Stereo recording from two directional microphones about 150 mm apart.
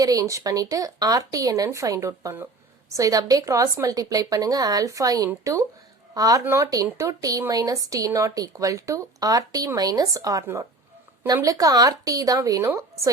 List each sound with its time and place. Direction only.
0.0 s speech: 25° right (ahead or behind)